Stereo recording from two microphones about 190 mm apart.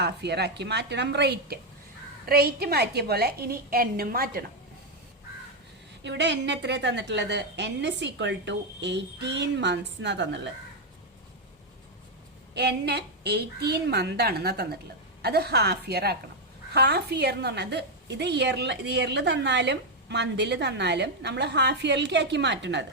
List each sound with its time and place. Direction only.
0.0 s a woman's voice: 60° right (ahead or behind)
6.0 s a woman's voice: 65° right (ahead or behind)
12.5 s a woman's voice: 60° right (ahead or behind)